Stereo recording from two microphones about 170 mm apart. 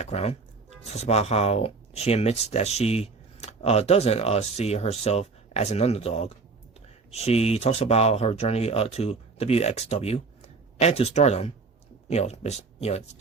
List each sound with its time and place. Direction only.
0.0 s speech: 35° left (ahead or behind)